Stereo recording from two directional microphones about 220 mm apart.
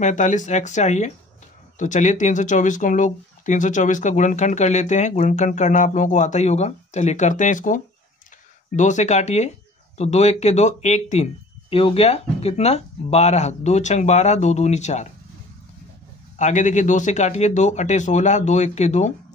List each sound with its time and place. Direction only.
0.0 s speech: 35° left (ahead or behind)
16.3 s speech: 35° left (ahead or behind)